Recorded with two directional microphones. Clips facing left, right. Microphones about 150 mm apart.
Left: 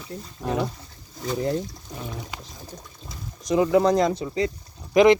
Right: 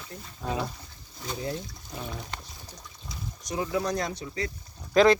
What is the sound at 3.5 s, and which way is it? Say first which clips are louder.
Speech: left 10 dB; 70° left (ahead or behind).